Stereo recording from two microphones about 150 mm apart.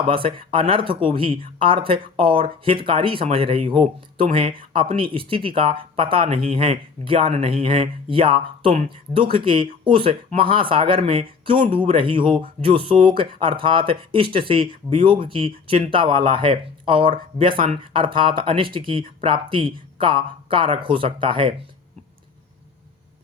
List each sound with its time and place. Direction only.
0.1 s speech: 35° right (ahead or behind)